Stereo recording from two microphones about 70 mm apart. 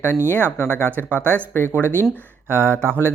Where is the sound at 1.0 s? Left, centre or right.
Centre.